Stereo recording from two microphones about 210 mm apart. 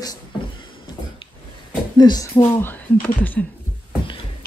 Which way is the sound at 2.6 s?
10° left (ahead or behind).